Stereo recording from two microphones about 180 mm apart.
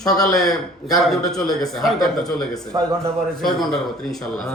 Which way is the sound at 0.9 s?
Centre (ahead or behind).